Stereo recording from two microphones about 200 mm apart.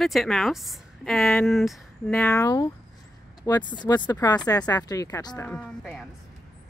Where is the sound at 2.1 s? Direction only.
10° left (ahead or behind).